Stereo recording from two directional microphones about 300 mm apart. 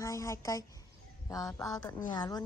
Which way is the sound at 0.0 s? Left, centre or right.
Centre.